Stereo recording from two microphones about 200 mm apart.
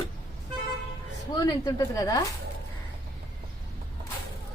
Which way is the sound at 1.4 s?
15° left (ahead or behind).